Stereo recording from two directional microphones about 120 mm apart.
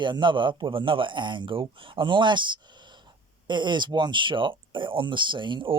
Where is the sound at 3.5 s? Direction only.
40° right (ahead or behind).